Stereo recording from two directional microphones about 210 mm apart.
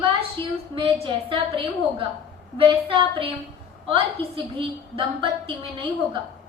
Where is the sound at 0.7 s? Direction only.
25° right (ahead or behind).